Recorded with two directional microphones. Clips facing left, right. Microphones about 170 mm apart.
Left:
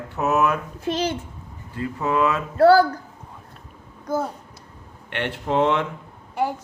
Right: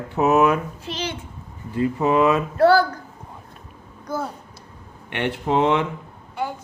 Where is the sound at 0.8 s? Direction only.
45° left (ahead or behind).